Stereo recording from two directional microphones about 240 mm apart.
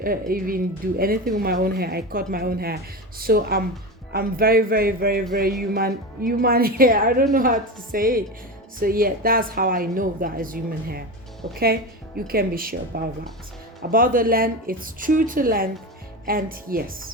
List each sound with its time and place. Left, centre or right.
0.0 s speech: right